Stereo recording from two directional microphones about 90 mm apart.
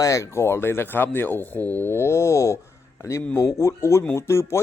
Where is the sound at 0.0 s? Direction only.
35° left (ahead or behind).